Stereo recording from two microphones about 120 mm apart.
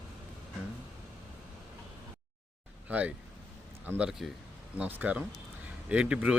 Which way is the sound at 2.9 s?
10° right (ahead or behind).